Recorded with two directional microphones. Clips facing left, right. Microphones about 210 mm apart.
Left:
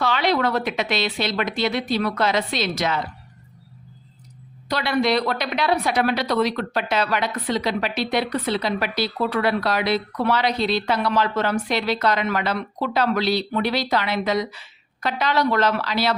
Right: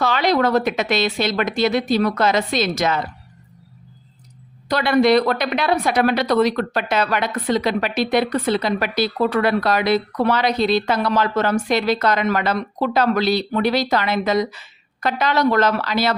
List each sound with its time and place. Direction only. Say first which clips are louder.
0.0 s speech: right 3 dB; 45° right (ahead or behind)
4.7 s speech: right 6 dB; 50° right (ahead or behind)